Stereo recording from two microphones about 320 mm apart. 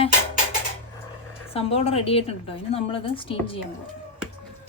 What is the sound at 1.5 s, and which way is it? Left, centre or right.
A woman's voice, centre.